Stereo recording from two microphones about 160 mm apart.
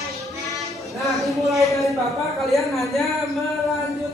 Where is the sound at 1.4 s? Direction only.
20° right (ahead or behind).